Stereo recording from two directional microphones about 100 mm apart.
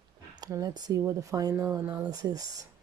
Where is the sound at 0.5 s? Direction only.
40° right (ahead or behind).